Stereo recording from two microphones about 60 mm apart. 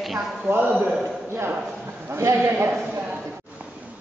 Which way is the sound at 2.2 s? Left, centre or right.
Right.